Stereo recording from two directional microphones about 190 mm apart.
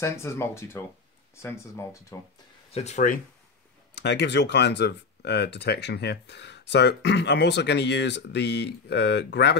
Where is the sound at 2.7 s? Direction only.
35° left (ahead or behind).